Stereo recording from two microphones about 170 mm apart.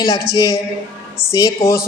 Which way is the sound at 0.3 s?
20° left (ahead or behind).